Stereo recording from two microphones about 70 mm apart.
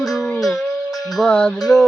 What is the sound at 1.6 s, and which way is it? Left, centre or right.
Music, centre.